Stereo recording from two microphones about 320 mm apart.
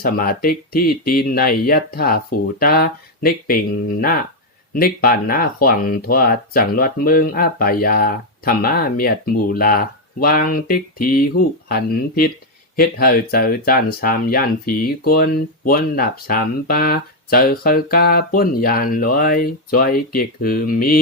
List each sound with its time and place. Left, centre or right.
0.0 s speech: left